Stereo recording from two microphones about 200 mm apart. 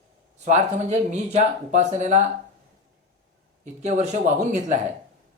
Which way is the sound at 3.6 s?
35° right (ahead or behind).